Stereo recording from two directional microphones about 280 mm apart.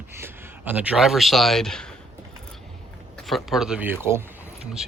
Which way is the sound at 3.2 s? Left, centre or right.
Centre.